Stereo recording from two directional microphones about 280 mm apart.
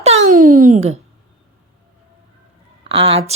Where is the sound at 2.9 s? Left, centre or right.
Centre.